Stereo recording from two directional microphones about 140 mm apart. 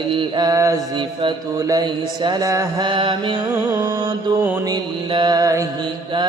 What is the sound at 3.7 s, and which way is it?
Music, 25° right (ahead or behind).